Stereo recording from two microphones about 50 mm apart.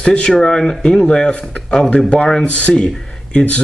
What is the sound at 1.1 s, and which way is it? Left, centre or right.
Speech, left.